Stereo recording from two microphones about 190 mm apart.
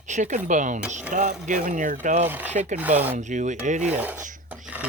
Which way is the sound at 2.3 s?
10° right (ahead or behind).